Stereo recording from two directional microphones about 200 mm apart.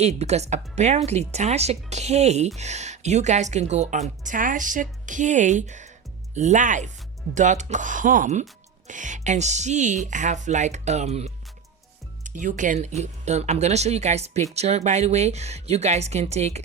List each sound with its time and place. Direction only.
0.0 s speech: 35° right (ahead or behind)